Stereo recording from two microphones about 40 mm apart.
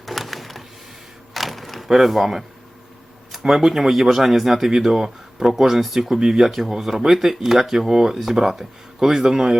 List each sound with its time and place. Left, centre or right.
0.0 s a sound: centre
1.9 s speech: centre
3.4 s speech: centre